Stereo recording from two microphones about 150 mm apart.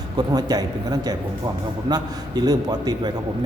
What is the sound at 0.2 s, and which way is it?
A man's voice, 25° right (ahead or behind).